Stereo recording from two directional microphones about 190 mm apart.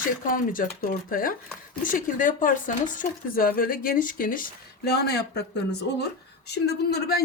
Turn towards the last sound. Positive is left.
turn(degrees=55)  # may be behind; listen again after turning